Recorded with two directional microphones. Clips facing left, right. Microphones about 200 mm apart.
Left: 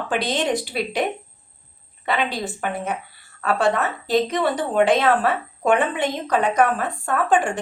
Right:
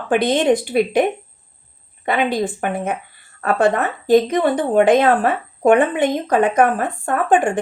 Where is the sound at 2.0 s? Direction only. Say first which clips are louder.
Right 5 dB; 50° right (ahead or behind).